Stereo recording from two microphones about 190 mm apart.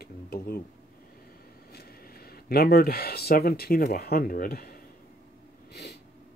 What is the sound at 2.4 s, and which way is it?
Speech, 55° left (ahead or behind).